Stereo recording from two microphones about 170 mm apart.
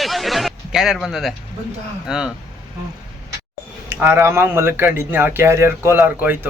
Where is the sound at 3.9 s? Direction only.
15° right (ahead or behind).